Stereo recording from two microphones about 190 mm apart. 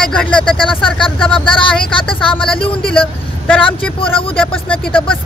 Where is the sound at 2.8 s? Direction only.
5° left (ahead or behind).